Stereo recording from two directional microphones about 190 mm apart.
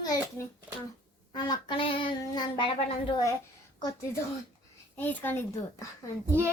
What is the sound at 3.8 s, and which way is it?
A woman's voice, 15° left (ahead or behind).